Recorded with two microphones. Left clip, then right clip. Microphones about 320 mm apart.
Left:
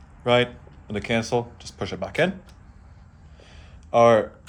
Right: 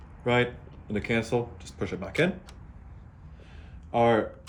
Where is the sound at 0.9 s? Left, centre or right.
Left.